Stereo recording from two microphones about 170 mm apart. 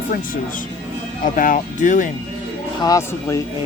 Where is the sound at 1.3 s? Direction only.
50° left (ahead or behind).